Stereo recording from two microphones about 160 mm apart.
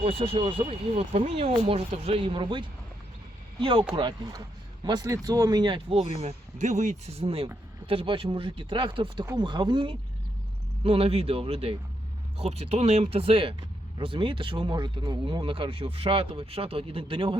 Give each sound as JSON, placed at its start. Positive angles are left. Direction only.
{"t": 0.0, "sound": "speech", "side_deg": -35}